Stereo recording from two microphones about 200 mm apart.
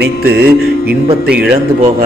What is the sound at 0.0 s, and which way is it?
Music, 55° right (ahead or behind).